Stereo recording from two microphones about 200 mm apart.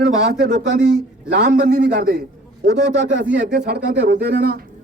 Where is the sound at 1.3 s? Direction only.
55° right (ahead or behind).